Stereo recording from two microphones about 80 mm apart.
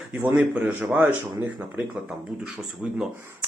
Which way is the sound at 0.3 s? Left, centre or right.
Centre.